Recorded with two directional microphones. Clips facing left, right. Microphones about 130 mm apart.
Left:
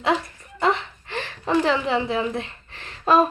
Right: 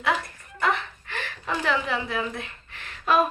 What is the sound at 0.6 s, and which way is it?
A woman's voice, 25° left (ahead or behind).